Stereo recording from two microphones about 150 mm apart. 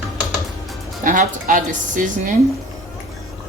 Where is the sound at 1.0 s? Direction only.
60° right (ahead or behind).